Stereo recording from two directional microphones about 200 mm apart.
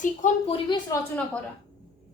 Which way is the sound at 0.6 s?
20° left (ahead or behind).